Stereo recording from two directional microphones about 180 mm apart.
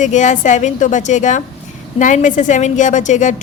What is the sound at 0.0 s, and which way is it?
A woman's voice, 40° left (ahead or behind).